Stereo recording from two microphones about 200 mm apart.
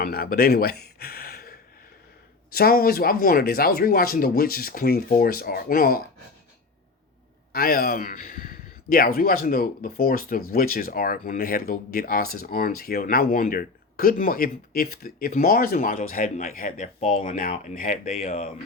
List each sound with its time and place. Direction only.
0.0 s a sound: 50° left (ahead or behind)
2.5 s speech: 50° left (ahead or behind)
7.5 s speech: 50° left (ahead or behind)